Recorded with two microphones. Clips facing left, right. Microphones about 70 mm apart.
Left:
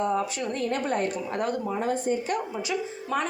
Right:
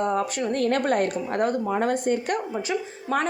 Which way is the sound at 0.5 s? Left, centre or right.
Right.